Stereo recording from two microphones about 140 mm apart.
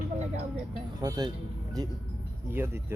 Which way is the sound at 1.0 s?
30° right (ahead or behind).